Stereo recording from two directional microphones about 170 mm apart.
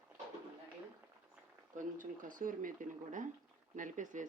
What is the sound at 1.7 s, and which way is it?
Speech, 50° right (ahead or behind).